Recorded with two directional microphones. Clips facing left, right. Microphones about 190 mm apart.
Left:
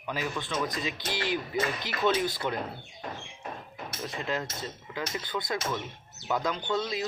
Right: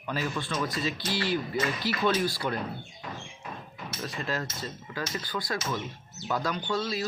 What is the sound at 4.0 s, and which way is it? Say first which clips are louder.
Speech: even; 20° left (ahead or behind).